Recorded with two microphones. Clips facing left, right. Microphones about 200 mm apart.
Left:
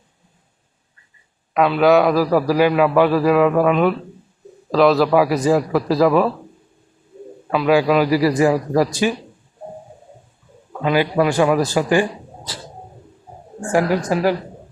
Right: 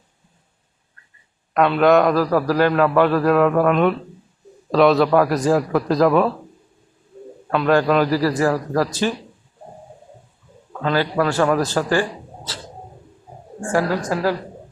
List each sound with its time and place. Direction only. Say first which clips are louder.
1.5 s a man's voice: left 1 dB; 5° left (ahead or behind)
7.5 s a man's voice: left 1 dB; 5° left (ahead or behind)
10.7 s a man's voice: left 2 dB; 15° left (ahead or behind)
13.7 s a man's voice: left 3 dB; 15° left (ahead or behind)